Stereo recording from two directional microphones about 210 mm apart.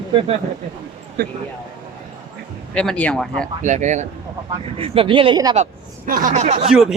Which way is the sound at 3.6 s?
35° right (ahead or behind).